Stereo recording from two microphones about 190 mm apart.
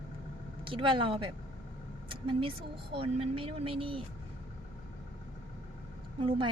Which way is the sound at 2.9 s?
30° right (ahead or behind).